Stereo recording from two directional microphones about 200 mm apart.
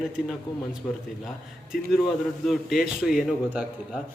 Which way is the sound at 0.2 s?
5° right (ahead or behind).